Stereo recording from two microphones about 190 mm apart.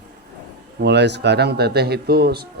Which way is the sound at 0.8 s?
65° right (ahead or behind).